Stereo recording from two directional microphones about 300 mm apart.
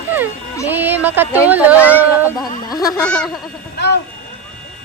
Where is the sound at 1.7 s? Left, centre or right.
Centre.